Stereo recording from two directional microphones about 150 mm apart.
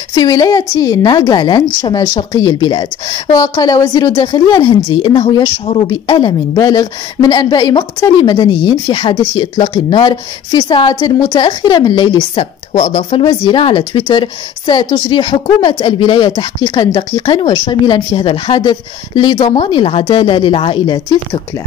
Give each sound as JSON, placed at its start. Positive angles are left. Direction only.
{"t": 0.1, "sound": "a woman's voice", "side_deg": 25}